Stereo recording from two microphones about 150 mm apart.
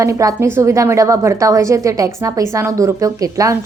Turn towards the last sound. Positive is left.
turn(degrees=-20)  # may be behind; listen again after turning